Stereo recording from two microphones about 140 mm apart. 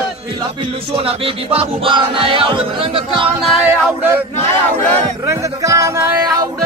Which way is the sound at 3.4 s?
Centre (ahead or behind).